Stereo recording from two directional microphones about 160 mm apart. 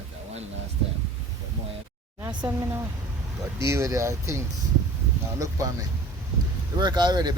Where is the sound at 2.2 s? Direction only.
15° right (ahead or behind).